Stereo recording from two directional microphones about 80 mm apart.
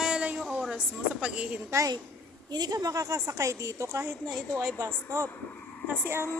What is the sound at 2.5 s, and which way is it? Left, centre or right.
Speech, right.